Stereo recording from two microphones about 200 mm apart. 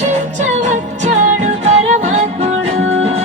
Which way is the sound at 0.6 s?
35° right (ahead or behind).